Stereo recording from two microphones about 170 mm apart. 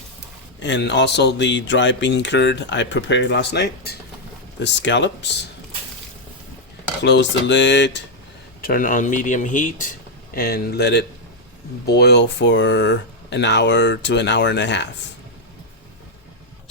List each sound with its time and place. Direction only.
0.6 s speech: 90° left
4.6 s speech: 90° left
7.0 s speech: 90° left
8.6 s speech: 55° left (ahead or behind)
10.3 s speech: 65° left (ahead or behind); by 14.8 s 90° left